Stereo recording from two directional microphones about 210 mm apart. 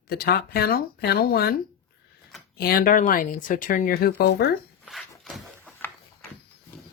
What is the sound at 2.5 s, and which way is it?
Speech, 45° left (ahead or behind).